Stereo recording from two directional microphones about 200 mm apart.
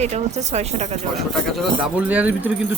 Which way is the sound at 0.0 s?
35° right (ahead or behind).